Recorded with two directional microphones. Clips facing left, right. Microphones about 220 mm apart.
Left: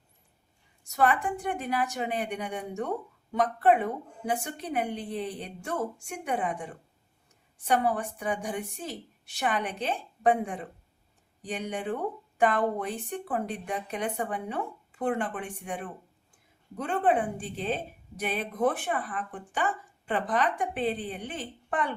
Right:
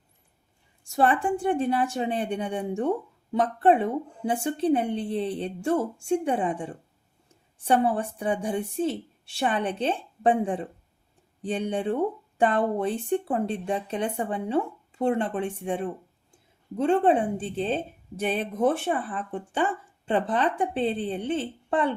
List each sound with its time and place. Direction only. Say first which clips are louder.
0.9 s a woman's voice: right 3 dB; 30° right (ahead or behind)